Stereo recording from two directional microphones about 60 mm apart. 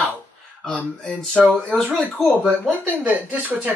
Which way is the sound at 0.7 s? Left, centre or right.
Centre.